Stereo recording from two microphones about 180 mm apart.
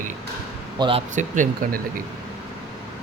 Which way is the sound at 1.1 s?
45° right (ahead or behind).